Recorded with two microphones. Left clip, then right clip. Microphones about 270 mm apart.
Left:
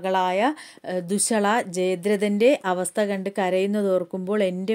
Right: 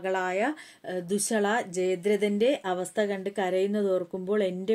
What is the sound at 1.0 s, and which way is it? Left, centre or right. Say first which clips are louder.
Speech: left 3 dB; left.